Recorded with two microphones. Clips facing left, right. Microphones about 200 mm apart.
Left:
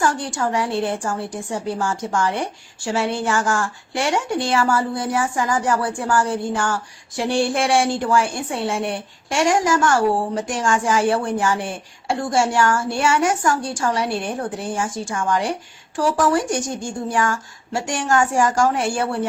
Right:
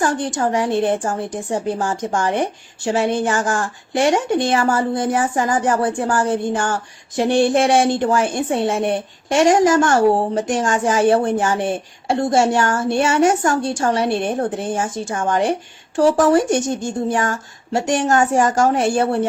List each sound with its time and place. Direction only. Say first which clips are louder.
0.1 s a woman's voice: right 3 dB; 20° right (ahead or behind)